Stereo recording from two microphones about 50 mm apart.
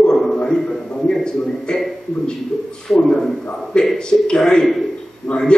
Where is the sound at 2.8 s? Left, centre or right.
Centre.